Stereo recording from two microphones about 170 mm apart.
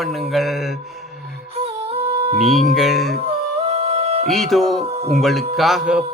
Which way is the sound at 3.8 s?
35° right (ahead or behind).